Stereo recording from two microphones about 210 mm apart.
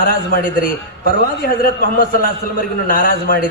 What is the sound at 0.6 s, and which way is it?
Speech, 45° left (ahead or behind).